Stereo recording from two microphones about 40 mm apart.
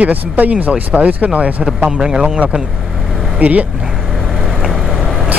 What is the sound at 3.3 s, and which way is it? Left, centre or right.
Speech, right.